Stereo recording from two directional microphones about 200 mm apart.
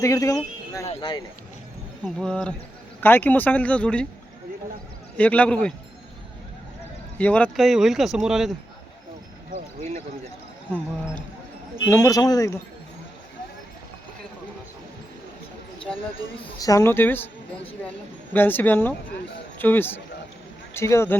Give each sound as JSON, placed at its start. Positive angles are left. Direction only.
{"t": 0.0, "sound": "speech", "side_deg": 15}
{"t": 2.0, "sound": "speech", "side_deg": 0}
{"t": 5.1, "sound": "speech", "side_deg": 5}
{"t": 7.2, "sound": "speech", "side_deg": 5}
{"t": 11.9, "sound": "speech", "side_deg": 15}
{"t": 16.6, "sound": "speech", "side_deg": 15}
{"t": 18.3, "sound": "speech", "side_deg": 10}